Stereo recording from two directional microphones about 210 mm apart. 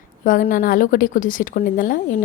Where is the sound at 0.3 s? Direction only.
40° left (ahead or behind).